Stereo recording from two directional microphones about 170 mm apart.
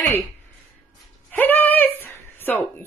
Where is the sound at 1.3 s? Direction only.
10° left (ahead or behind).